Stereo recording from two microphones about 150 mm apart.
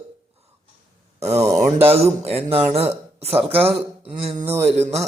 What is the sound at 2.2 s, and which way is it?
Speech, 40° right (ahead or behind).